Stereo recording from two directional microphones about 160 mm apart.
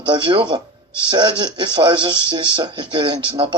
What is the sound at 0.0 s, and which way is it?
Speech, 30° right (ahead or behind).